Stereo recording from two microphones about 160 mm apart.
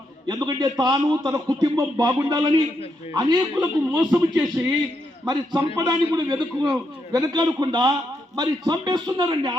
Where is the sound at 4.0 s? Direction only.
5° right (ahead or behind).